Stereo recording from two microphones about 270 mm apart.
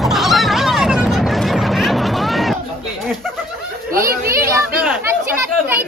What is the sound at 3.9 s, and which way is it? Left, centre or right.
Chatter, right.